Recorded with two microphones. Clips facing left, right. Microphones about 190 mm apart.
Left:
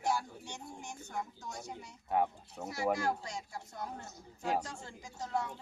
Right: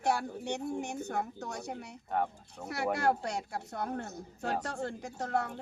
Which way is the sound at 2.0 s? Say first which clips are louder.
Left 1 dB; 5° left (ahead or behind).